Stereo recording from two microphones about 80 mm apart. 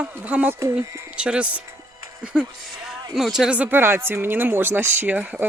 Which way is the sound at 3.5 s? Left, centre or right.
Centre.